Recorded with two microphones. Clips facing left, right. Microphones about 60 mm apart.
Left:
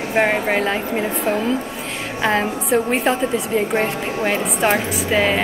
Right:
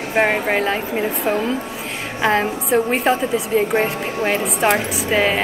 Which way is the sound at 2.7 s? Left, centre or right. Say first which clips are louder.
Right 1 dB; centre.